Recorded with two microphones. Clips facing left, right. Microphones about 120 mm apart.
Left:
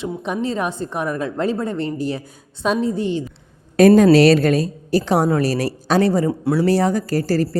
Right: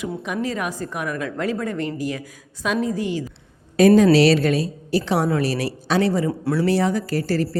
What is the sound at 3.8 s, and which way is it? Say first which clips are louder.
A woman's voice: left 3 dB; 50° left (ahead or behind).